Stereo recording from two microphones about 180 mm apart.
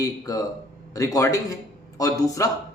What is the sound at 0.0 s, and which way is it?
Speech, 20° left (ahead or behind).